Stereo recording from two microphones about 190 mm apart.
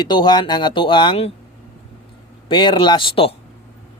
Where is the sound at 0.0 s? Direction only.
25° left (ahead or behind).